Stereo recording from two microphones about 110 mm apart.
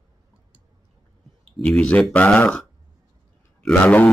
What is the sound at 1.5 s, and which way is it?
A man's voice, 10° left (ahead or behind).